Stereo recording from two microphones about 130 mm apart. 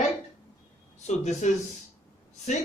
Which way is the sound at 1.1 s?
65° left (ahead or behind).